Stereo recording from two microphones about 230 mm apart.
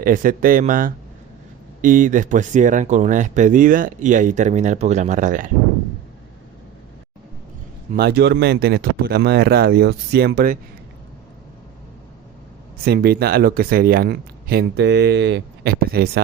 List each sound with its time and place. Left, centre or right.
0.0 s speech: right
7.9 s speech: right
12.8 s speech: right